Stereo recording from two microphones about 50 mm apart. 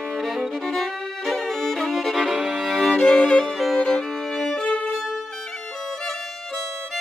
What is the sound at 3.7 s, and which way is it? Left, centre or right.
Violin, centre.